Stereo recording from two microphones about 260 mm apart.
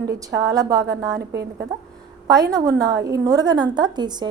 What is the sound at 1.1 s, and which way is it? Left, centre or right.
Speech, right.